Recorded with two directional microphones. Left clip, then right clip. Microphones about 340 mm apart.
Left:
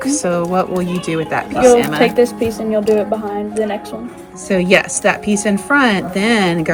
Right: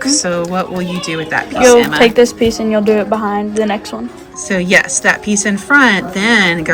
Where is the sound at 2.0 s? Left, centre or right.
Right.